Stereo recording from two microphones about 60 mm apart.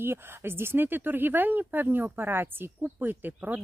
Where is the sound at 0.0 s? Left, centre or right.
Right.